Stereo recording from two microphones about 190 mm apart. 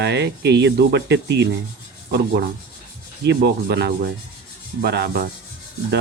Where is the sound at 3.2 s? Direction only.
60° right (ahead or behind).